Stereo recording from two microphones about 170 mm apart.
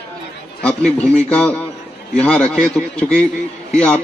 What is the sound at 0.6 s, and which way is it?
A man's voice, 5° left (ahead or behind).